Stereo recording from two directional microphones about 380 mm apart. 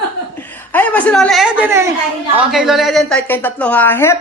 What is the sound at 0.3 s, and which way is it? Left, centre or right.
A woman's voice, centre.